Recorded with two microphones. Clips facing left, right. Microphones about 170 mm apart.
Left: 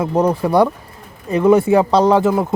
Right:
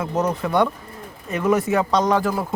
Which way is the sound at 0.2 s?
30° left (ahead or behind).